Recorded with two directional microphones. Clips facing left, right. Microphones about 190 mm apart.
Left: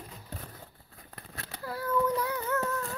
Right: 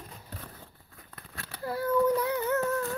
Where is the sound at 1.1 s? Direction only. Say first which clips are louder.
Left 1 dB; 20° left (ahead or behind).